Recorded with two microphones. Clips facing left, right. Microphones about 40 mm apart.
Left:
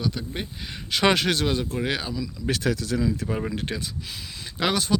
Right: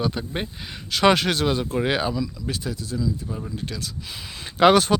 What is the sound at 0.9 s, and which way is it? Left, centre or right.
Speech, centre.